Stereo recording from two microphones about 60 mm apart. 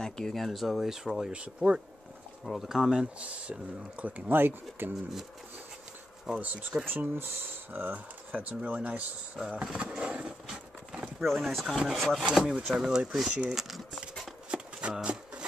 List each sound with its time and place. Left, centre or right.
0.0 s speech: centre
1.3 s speech: centre
2.4 s speech: centre; by 4.1 s right
4.3 s speech: right
6.4 s speech: right
9.4 s speech: centre
11.1 s speech: centre
13.5 s a sound: centre
14.5 s a sound: centre